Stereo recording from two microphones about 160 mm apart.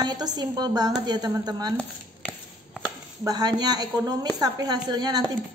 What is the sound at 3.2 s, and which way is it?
A woman's voice, 25° right (ahead or behind).